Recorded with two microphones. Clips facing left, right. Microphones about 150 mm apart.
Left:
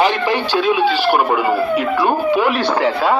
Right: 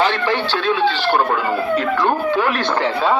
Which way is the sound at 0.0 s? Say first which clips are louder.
Left 2 dB; 15° left (ahead or behind).